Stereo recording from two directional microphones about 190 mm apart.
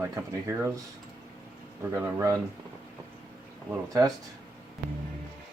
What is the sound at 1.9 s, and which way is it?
Speech, 15° right (ahead or behind).